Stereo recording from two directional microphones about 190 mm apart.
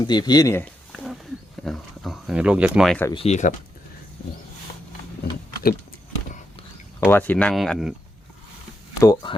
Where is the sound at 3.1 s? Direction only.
30° left (ahead or behind).